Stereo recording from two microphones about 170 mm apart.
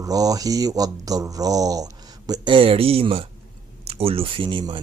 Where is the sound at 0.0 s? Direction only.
20° right (ahead or behind).